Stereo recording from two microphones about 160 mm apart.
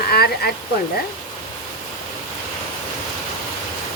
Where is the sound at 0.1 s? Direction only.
75° left (ahead or behind).